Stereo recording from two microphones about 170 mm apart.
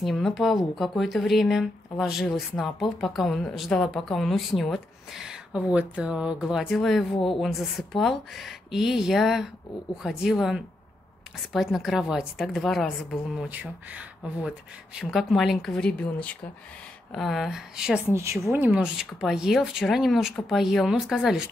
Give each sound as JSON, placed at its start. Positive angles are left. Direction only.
{"t": 0.0, "sound": "speech", "side_deg": 0}
{"t": 18.1, "sound": "a woman's voice", "side_deg": -15}